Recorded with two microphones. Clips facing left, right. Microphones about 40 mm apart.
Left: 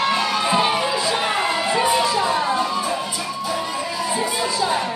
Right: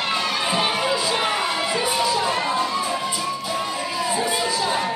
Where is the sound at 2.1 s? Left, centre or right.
Left.